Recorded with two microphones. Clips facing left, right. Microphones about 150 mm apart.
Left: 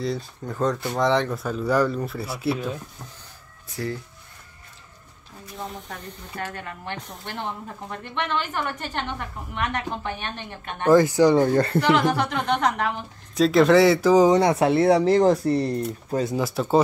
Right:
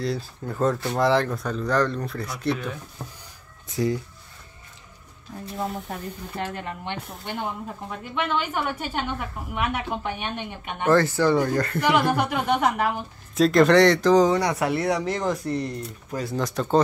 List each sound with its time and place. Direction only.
0.0 s speech: centre (ahead or behind)
3.6 s speech: 20° right (ahead or behind)
5.9 s speech: 25° right (ahead or behind)
7.0 s a woman's voice: 5° right (ahead or behind)
10.9 s speech: 15° left (ahead or behind)
11.4 s speech: 30° left (ahead or behind)
11.8 s speech: 10° right (ahead or behind); by 14.3 s 10° left (ahead or behind)
14.3 s speech: 25° left (ahead or behind)
16.3 s speech: 5° left (ahead or behind)